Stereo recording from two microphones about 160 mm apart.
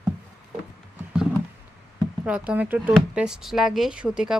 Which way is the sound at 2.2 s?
10° right (ahead or behind).